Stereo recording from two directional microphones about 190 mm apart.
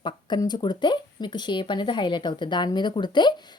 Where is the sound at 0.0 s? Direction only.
20° left (ahead or behind).